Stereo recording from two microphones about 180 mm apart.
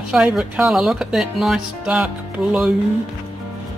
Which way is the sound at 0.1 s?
5° right (ahead or behind).